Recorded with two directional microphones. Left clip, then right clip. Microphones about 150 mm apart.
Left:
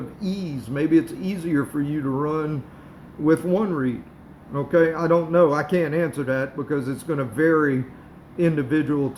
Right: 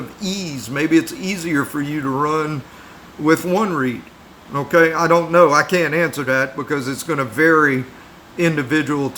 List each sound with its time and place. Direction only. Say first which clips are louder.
0.2 s a man's voice: right 6 dB; 20° right (ahead or behind)